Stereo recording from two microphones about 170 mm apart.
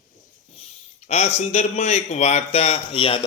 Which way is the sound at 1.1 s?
40° left (ahead or behind).